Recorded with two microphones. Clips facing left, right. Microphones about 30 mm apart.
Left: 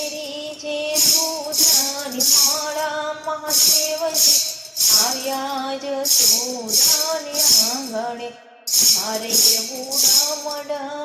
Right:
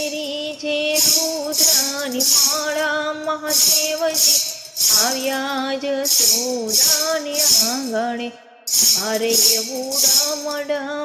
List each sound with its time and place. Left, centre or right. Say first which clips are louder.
1.5 s music: left 1 dB; centre
2.7 s music: right 3 dB; right
4.2 s music: even; centre
5.3 s music: right 2 dB; right